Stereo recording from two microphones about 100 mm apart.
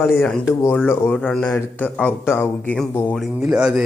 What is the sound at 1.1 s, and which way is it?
Speech, 10° left (ahead or behind).